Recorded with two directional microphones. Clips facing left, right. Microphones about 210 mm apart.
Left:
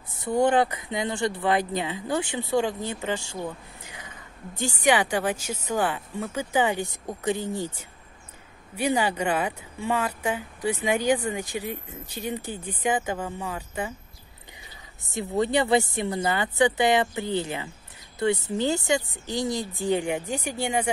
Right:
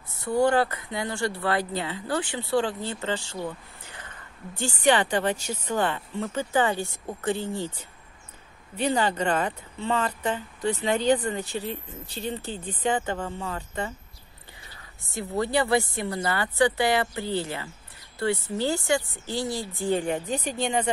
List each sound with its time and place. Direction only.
0.2 s speech: 20° left (ahead or behind)
8.7 s speech: 10° left (ahead or behind)
15.0 s speech: 20° left (ahead or behind)